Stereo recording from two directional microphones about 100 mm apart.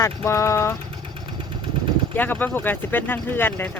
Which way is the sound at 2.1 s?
20° left (ahead or behind).